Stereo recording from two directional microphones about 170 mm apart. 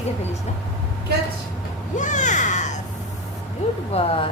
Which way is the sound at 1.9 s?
45° left (ahead or behind).